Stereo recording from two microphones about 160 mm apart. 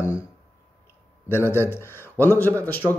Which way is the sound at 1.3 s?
15° left (ahead or behind).